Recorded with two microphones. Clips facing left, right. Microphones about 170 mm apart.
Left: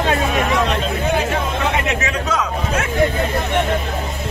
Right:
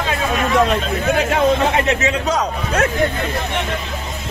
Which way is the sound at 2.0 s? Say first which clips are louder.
Right 3 dB; 40° right (ahead or behind).